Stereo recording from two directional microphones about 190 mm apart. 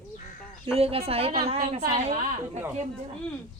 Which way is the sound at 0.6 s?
30° right (ahead or behind).